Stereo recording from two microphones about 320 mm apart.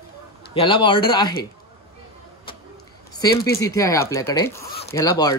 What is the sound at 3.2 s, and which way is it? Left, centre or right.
Speech, centre.